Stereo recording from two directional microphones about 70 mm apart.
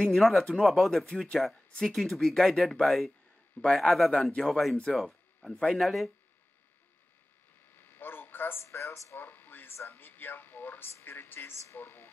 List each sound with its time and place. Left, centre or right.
0.0 s speech: centre
3.6 s a man's voice: left
3.9 s speech: centre
5.8 s speech: centre
7.7 s a sound: left
8.6 s speech: left
9.2 s a sound: left
11.0 s speech: left